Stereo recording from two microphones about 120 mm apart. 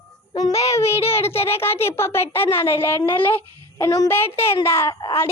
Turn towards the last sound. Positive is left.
turn(degrees=20)  # may be behind; listen again after turning